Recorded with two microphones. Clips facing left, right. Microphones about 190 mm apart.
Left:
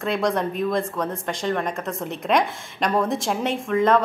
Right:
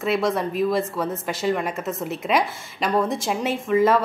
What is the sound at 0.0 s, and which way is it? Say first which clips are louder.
Speech: right 1 dB; 5° right (ahead or behind).